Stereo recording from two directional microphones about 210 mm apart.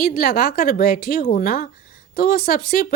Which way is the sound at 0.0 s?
45° left (ahead or behind).